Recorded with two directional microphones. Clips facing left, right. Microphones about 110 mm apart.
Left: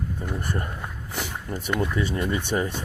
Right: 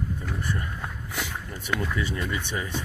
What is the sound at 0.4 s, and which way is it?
Speech, 45° left (ahead or behind).